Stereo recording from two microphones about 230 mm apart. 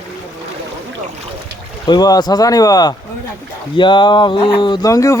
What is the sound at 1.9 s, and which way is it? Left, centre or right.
Speech, centre.